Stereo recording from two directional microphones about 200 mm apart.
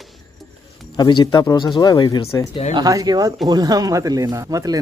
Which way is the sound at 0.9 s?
20° left (ahead or behind).